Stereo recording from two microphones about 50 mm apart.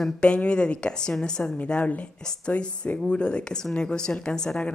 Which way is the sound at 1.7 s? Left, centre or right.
Left.